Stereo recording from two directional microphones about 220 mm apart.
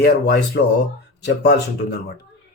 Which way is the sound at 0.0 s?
45° left (ahead or behind).